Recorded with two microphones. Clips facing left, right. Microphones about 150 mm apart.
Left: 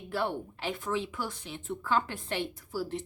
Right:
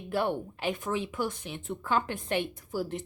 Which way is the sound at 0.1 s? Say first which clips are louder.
Right 3 dB; 15° right (ahead or behind).